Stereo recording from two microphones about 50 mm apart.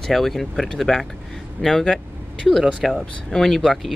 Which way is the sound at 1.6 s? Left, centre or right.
Left.